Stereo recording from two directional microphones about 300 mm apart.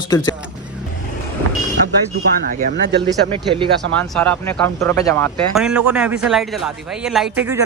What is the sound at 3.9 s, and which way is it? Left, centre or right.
A man's voice, centre.